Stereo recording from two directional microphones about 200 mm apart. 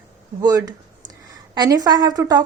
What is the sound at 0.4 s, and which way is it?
A woman's voice, 20° right (ahead or behind).